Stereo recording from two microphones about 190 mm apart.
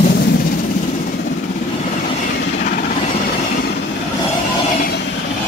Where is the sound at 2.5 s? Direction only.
40° left (ahead or behind).